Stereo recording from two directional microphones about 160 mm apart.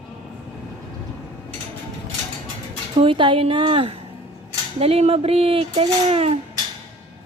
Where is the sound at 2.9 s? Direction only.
30° right (ahead or behind).